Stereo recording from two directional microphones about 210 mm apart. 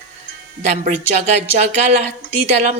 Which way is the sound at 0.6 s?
35° right (ahead or behind).